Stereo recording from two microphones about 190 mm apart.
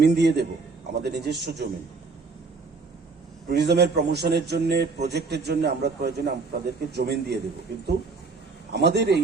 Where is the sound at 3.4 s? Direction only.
60° right (ahead or behind).